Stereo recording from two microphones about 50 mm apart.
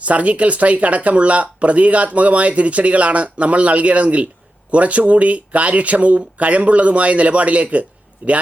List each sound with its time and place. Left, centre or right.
0.0 s speech: right